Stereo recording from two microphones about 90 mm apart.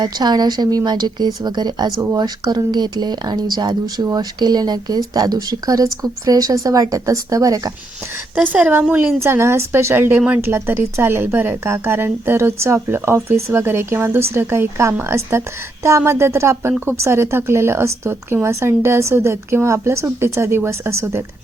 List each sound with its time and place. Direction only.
0.0 s speech: 50° right (ahead or behind)
8.5 s speech: 15° right (ahead or behind)
9.2 s a woman's voice: 30° right (ahead or behind)